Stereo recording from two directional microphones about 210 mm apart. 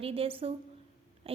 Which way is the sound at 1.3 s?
25° right (ahead or behind).